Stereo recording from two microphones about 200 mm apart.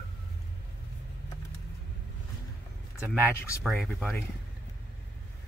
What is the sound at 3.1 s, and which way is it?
Speech, 5° left (ahead or behind).